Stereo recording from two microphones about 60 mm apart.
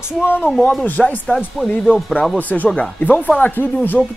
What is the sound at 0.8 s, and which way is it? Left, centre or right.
Speech, left.